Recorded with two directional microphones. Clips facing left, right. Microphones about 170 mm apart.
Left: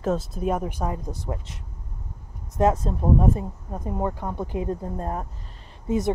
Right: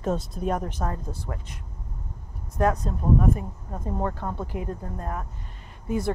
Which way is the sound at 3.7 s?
15° left (ahead or behind).